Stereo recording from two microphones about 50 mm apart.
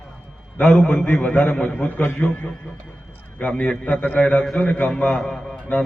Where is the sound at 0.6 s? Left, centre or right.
Centre.